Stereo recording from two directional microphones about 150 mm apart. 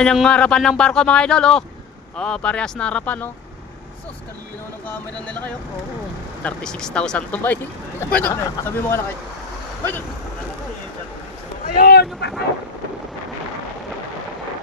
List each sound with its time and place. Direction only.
0.0 s speech: 5° left (ahead or behind)
4.8 s speech: 10° left (ahead or behind)
11.6 s speech: 80° left